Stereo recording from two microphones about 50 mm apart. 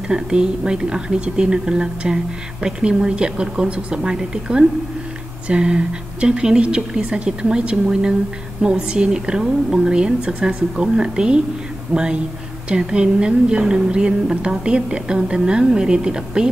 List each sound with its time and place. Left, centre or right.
0.1 s a woman's voice: centre